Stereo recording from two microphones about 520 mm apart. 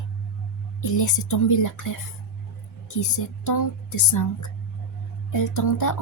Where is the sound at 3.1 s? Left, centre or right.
Left.